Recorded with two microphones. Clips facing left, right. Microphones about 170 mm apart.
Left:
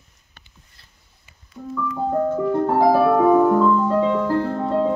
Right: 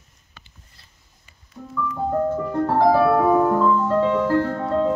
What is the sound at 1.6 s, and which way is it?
Music, 5° left (ahead or behind).